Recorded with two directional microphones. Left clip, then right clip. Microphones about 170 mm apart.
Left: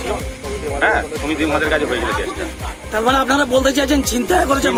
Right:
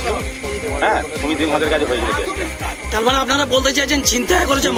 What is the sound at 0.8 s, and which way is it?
Speech, centre (ahead or behind).